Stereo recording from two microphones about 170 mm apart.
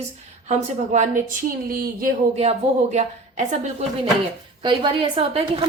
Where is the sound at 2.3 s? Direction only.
40° right (ahead or behind).